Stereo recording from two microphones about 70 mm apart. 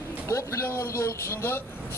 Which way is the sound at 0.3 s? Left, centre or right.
Left.